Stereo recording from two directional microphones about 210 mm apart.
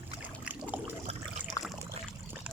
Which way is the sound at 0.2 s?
10° right (ahead or behind).